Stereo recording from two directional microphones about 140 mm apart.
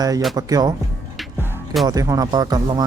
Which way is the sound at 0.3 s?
25° right (ahead or behind).